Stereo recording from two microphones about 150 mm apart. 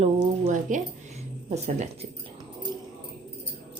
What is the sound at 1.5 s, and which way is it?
Speech, 50° right (ahead or behind).